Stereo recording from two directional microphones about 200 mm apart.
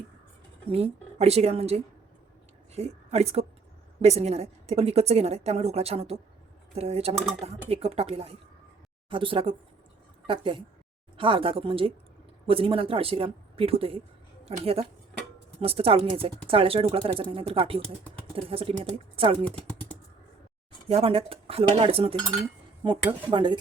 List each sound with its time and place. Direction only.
0.7 s a woman's voice: 30° right (ahead or behind)
20.8 s speech: 30° right (ahead or behind)